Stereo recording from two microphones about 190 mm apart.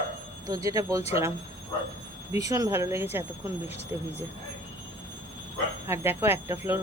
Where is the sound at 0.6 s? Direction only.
15° right (ahead or behind).